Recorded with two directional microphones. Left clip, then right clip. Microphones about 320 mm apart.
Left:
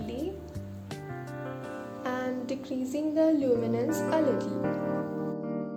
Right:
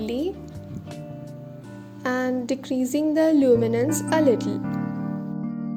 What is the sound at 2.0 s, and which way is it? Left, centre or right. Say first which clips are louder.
A woman's voice: right 8 dB; centre.